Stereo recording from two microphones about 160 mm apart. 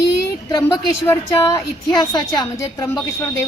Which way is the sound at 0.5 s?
20° left (ahead or behind).